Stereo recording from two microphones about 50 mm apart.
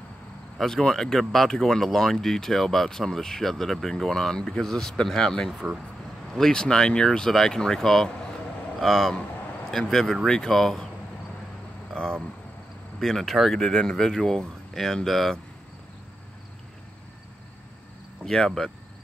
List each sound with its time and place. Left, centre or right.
0.6 s speech: centre
11.9 s speech: centre
13.0 s speech: centre
13.6 s speech: centre
18.2 s speech: centre